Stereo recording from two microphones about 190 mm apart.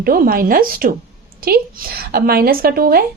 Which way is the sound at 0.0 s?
50° right (ahead or behind).